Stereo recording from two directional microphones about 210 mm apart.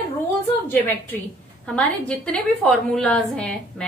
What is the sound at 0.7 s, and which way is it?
A woman's voice, 10° left (ahead or behind).